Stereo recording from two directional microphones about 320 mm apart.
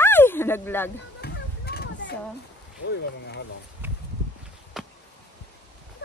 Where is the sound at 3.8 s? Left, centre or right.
Centre.